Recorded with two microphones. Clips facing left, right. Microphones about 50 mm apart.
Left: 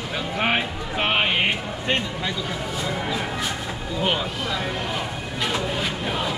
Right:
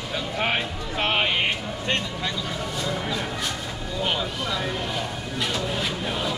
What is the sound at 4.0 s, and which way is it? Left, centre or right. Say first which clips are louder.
Speech: left 2 dB; centre.